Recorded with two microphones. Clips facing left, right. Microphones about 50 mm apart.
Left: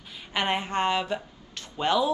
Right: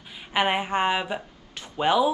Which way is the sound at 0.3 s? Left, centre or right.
Centre.